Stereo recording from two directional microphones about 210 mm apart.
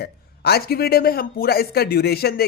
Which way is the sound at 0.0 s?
50° left (ahead or behind).